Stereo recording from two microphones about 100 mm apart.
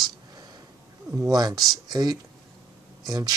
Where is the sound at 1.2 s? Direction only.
40° right (ahead or behind).